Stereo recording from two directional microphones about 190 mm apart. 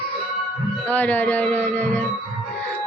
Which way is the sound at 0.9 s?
10° left (ahead or behind).